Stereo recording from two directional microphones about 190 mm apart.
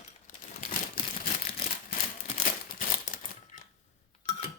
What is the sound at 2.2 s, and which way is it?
Crumpling, 40° left (ahead or behind).